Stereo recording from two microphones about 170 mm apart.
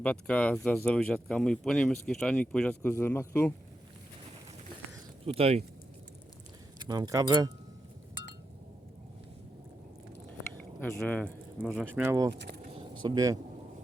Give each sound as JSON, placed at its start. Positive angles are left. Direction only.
{"t": 0.0, "sound": "speech", "side_deg": 10}
{"t": 5.2, "sound": "speech", "side_deg": -35}
{"t": 6.7, "sound": "speech", "side_deg": -25}
{"t": 10.6, "sound": "speech", "side_deg": 10}
{"t": 11.8, "sound": "speech", "side_deg": -5}
{"t": 12.3, "sound": "a sound", "side_deg": -80}
{"t": 13.0, "sound": "speech", "side_deg": -25}